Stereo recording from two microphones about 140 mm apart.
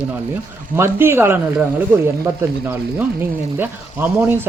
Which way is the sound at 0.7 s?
15° right (ahead or behind).